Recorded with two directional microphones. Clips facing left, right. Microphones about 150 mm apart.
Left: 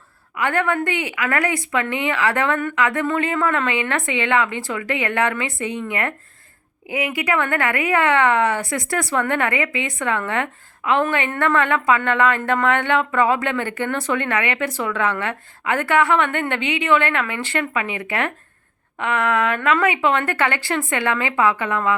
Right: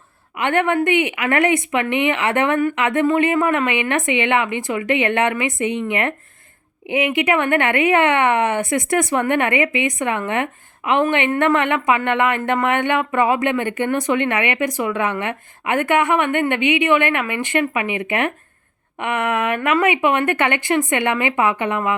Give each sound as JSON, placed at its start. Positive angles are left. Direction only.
{"t": 0.3, "sound": "a woman's voice", "side_deg": -20}